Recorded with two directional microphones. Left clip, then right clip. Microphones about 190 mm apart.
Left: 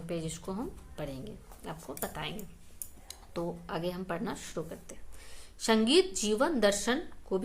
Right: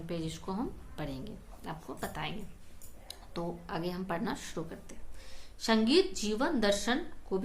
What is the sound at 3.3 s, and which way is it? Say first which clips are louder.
A woman's voice: left 2 dB; 20° left (ahead or behind).